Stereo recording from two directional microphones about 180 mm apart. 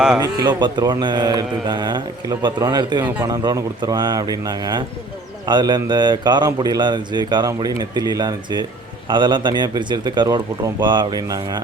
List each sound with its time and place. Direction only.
0.2 s a man's voice: 25° right (ahead or behind)